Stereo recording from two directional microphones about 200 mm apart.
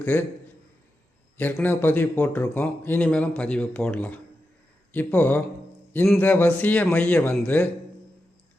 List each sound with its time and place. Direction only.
0.0 s speech: 10° left (ahead or behind)
1.4 s speech: 10° left (ahead or behind)